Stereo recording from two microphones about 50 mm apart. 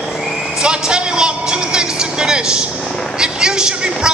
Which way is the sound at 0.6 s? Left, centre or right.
Centre.